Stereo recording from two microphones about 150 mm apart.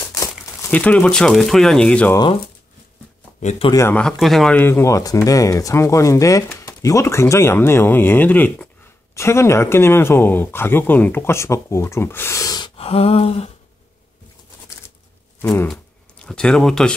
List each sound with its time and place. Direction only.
0.1 s crumpling: 20° left (ahead or behind)
0.7 s speech: 10° left (ahead or behind)
3.3 s speech: 50° left (ahead or behind)
3.7 s speech: 15° left (ahead or behind)
4.0 s speech: centre (ahead or behind)
4.6 s speech: 15° left (ahead or behind); by 13.5 s 40° left (ahead or behind)
15.4 s speech: 15° left (ahead or behind)